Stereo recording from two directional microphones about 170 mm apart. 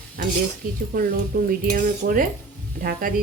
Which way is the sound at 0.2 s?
55° right (ahead or behind).